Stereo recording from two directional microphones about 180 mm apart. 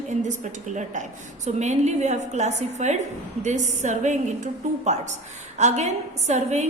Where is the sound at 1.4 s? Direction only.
40° right (ahead or behind).